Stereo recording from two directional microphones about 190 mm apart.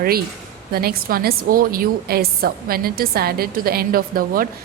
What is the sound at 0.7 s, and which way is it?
A woman's voice, 55° right (ahead or behind).